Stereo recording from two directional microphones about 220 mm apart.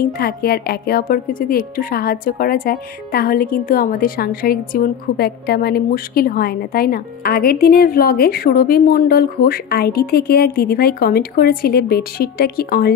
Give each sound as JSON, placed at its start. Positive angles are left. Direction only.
{"t": 0.0, "sound": "speech", "side_deg": 45}